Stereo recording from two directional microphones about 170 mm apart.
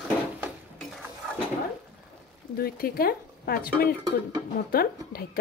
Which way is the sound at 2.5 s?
60° left (ahead or behind).